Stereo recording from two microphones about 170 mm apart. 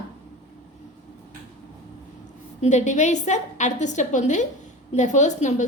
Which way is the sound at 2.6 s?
45° left (ahead or behind).